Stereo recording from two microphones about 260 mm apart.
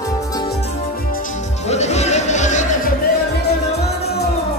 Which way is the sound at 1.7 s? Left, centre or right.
Left.